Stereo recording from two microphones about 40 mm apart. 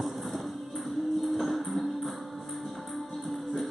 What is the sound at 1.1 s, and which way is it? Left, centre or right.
Music, centre.